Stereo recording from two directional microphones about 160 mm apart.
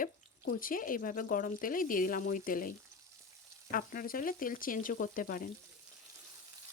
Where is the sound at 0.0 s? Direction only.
60° left (ahead or behind).